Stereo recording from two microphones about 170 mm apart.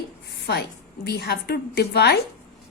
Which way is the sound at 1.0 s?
75° left (ahead or behind).